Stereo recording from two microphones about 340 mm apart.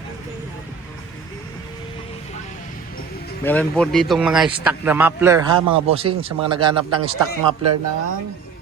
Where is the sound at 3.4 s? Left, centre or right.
Centre.